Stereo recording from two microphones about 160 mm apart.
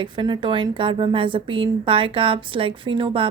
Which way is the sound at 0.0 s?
30° right (ahead or behind).